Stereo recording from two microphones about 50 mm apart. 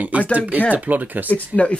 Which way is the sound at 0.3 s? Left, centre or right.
Right.